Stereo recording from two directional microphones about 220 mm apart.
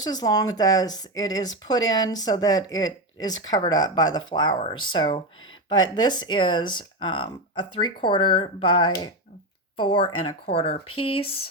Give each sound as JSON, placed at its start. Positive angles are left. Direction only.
{"t": 0.0, "sound": "speech", "side_deg": 20}